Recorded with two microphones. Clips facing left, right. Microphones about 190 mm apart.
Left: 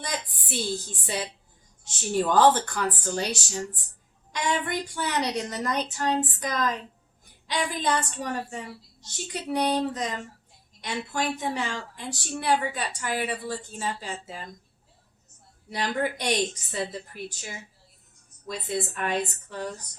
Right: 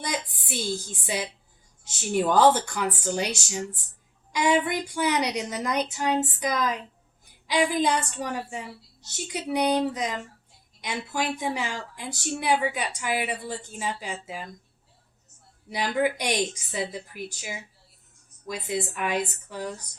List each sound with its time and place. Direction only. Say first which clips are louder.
0.0 s a woman's voice: right 2 dB; 10° right (ahead or behind)
15.7 s a woman's voice: right 3 dB; 10° right (ahead or behind)
18.4 s a woman's voice: right 1 dB; 10° right (ahead or behind)